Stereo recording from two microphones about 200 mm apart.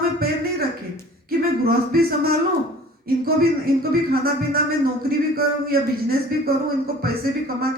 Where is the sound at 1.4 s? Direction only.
50° right (ahead or behind).